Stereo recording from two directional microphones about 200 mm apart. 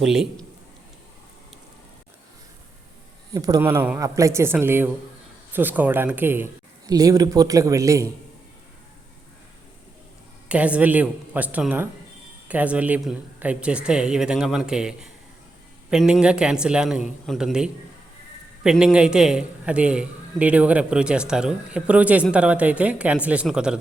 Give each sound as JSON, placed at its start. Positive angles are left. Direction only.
{"t": 0.0, "sound": "a man's voice", "side_deg": 0}
{"t": 3.3, "sound": "speech", "side_deg": -20}
{"t": 10.5, "sound": "a man's voice", "side_deg": -5}